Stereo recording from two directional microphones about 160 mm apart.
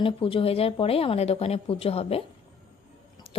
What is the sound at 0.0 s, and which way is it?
A woman's voice, 35° left (ahead or behind).